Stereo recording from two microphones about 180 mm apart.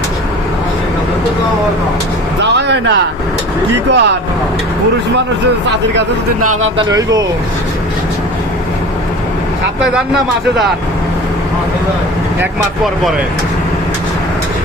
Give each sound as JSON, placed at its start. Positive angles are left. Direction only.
{"t": 2.4, "sound": "music", "side_deg": -75}
{"t": 3.8, "sound": "speech", "side_deg": -75}
{"t": 6.7, "sound": "speech", "side_deg": -20}
{"t": 9.9, "sound": "a man's voice", "side_deg": -5}